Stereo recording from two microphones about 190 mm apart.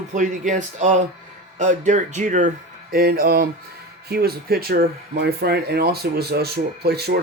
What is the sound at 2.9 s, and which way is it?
Speech, 50° right (ahead or behind).